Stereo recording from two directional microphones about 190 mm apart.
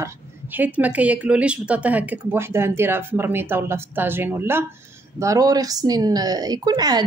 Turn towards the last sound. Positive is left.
turn(degrees=-20)  # may be behind; listen again after turning